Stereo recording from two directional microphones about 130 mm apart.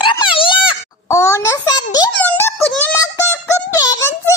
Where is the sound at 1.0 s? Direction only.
20° left (ahead or behind).